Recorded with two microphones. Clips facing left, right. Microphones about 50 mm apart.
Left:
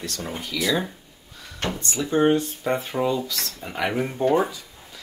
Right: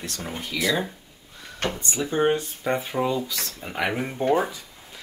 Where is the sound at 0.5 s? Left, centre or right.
Centre.